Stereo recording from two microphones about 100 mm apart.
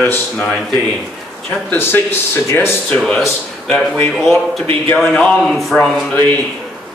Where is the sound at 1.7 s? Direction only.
20° left (ahead or behind).